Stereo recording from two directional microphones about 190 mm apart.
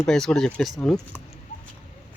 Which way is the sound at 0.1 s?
5° left (ahead or behind).